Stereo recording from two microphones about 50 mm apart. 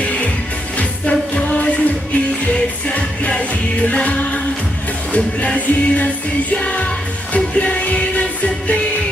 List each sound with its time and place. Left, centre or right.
0.8 s music: left